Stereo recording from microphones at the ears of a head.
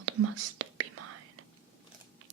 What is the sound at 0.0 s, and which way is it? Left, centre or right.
Whispering, right.